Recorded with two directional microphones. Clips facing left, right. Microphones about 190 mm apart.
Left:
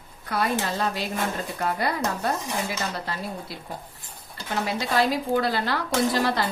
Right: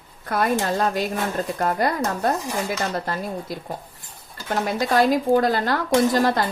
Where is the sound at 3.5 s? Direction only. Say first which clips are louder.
Right 5 dB; 45° right (ahead or behind).